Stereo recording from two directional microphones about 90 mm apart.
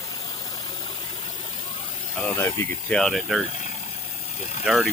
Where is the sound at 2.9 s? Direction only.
Centre (ahead or behind).